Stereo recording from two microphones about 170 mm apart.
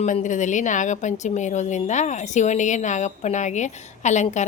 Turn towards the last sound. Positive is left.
turn(degrees=45)  # may be behind; listen again after turning